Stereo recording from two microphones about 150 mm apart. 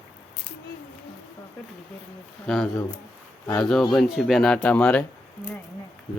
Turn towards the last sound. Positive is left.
turn(degrees=10)  # may be behind; listen again after turning